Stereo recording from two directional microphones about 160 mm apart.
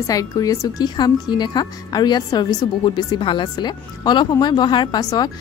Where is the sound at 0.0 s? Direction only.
20° left (ahead or behind).